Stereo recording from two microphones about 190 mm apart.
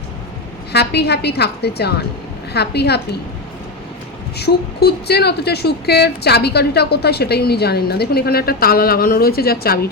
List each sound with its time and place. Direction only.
0.7 s speech: 60° left (ahead or behind)
4.4 s speech: 60° left (ahead or behind)